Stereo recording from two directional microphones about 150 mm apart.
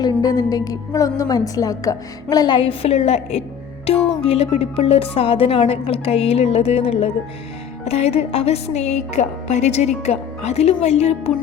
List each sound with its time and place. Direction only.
0.0 s a woman's voice: 25° left (ahead or behind); by 11.3 s 45° left (ahead or behind)